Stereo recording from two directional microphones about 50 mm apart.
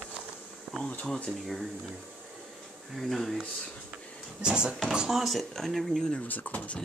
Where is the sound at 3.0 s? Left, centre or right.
Centre.